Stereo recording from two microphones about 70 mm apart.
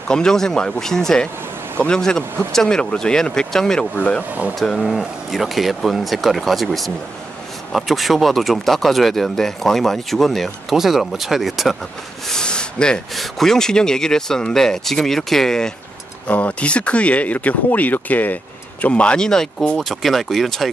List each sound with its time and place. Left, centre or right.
0.1 s speech: centre
3.9 s speech: left
4.6 s speech: centre
12.3 s a sound: centre
13.1 s speech: centre
16.3 s speech: left
19.8 s speech: centre